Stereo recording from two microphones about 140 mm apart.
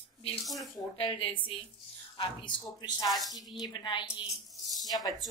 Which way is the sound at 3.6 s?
35° left (ahead or behind).